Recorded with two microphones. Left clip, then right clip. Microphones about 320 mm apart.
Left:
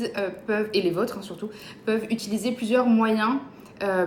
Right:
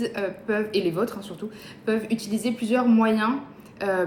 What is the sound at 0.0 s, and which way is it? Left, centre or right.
Speech, centre.